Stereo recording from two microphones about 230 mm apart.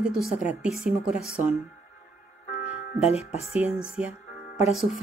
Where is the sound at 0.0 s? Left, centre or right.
Centre.